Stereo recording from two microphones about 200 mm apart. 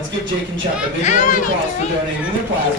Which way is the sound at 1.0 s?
40° left (ahead or behind).